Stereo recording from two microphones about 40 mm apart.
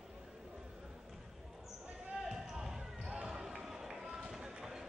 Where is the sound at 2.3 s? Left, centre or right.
Centre.